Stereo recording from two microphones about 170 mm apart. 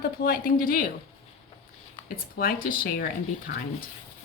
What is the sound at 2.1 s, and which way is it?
Speech, 60° left (ahead or behind).